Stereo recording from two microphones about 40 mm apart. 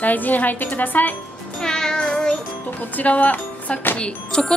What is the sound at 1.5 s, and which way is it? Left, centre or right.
Music, centre.